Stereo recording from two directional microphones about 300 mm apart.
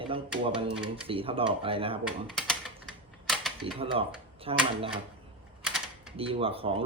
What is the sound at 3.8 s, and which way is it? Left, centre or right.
Speech, centre.